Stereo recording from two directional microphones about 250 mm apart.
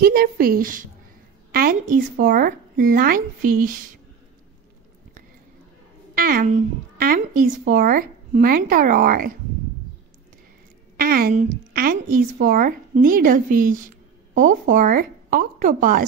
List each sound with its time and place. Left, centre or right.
0.0 s a woman's voice: right
6.1 s a woman's voice: right
11.0 s a woman's voice: right